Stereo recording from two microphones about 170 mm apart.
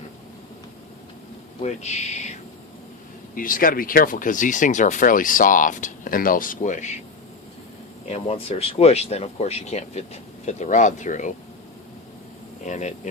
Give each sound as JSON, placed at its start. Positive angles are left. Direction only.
{"t": 1.6, "sound": "speech", "side_deg": 40}
{"t": 3.3, "sound": "speech", "side_deg": 55}
{"t": 8.0, "sound": "speech", "side_deg": 35}
{"t": 12.6, "sound": "speech", "side_deg": 45}